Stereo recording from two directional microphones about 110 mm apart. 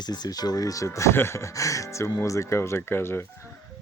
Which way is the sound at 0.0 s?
40° left (ahead or behind).